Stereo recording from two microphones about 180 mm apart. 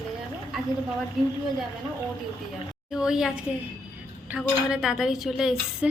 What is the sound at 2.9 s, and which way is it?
Speech, 5° right (ahead or behind).